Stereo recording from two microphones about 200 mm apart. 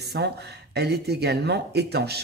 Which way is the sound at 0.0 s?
55° right (ahead or behind).